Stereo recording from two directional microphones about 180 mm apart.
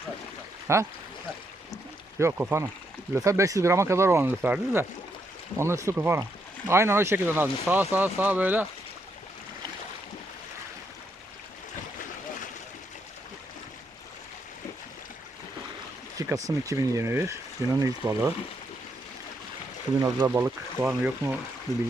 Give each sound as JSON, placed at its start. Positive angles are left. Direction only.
{"t": 0.7, "sound": "speech", "side_deg": -15}
{"t": 2.1, "sound": "speech", "side_deg": -15}
{"t": 16.1, "sound": "speech", "side_deg": -20}
{"t": 20.0, "sound": "speech", "side_deg": -20}
{"t": 21.7, "sound": "speech", "side_deg": 20}